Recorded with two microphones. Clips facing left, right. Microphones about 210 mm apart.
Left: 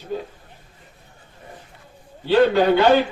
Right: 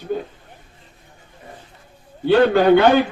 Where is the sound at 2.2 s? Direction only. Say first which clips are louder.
Right 2 dB; 55° right (ahead or behind).